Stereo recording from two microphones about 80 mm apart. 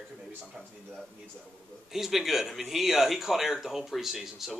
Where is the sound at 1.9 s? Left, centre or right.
Centre.